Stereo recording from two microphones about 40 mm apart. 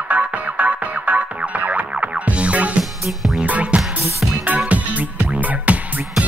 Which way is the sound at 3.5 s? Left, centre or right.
Right.